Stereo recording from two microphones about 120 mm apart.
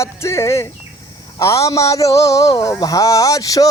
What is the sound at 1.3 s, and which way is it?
Speech, 25° left (ahead or behind).